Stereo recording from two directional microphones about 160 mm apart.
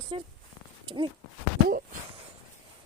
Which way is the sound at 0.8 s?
30° right (ahead or behind).